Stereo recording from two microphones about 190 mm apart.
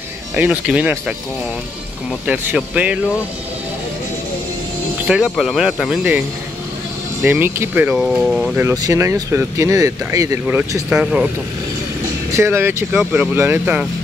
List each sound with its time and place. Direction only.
0.4 s speech: 5° right (ahead or behind)
2.2 s speech: 5° right (ahead or behind)
5.0 s speech: 5° right (ahead or behind)
7.2 s speech: 10° right (ahead or behind)
8.6 s speech: 15° right (ahead or behind)
12.3 s speech: 15° right (ahead or behind)